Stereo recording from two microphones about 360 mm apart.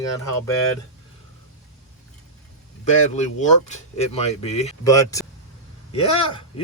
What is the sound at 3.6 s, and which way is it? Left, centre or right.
Speech, centre.